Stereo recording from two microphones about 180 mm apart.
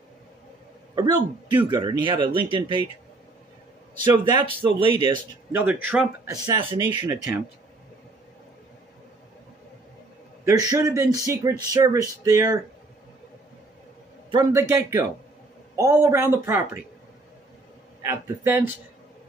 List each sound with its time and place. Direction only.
0.9 s speech: 25° right (ahead or behind)
4.0 s speech: 25° right (ahead or behind)
5.5 s speech: 10° right (ahead or behind)
6.3 s speech: 25° right (ahead or behind)
10.4 s speech: 15° right (ahead or behind)
14.3 s speech: 20° right (ahead or behind)
18.0 s speech: 15° right (ahead or behind)